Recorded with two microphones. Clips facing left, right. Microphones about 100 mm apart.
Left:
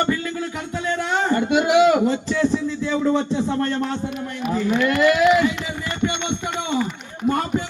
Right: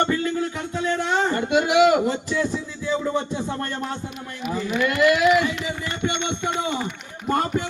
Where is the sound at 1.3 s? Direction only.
25° left (ahead or behind).